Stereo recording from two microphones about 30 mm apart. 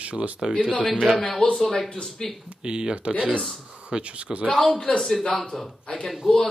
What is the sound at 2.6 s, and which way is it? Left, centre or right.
Speech, right.